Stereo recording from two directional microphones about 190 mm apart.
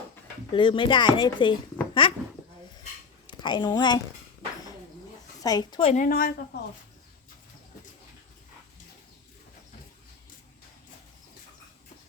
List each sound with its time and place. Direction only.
0.5 s speech: 25° left (ahead or behind)
2.0 s a sound: 25° left (ahead or behind)
3.2 s speech: 25° left (ahead or behind)
5.4 s speech: 20° left (ahead or behind)
5.9 s a woman's voice: 45° left (ahead or behind)